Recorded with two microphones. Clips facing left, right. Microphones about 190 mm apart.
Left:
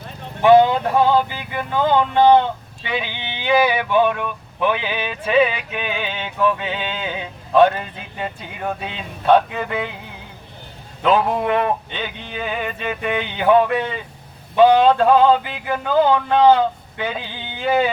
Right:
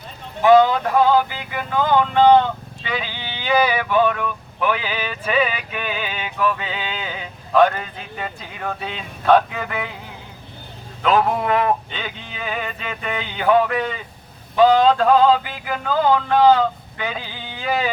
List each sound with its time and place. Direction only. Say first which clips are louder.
0.4 s music: left 1 dB; 25° left (ahead or behind)
11.0 s music: left 1 dB; 25° left (ahead or behind)
12.9 s music: left 7 dB; 20° left (ahead or behind)